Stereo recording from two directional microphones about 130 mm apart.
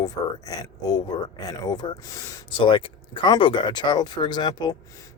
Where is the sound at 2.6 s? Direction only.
40° left (ahead or behind).